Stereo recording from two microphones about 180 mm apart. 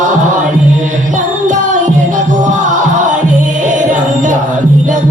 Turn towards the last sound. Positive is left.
turn(degrees=-45)  # may be behind; listen again after turning